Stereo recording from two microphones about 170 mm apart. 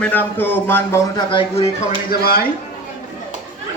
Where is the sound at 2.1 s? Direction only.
60° left (ahead or behind).